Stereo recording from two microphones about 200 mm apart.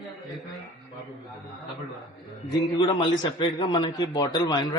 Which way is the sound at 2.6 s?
20° left (ahead or behind).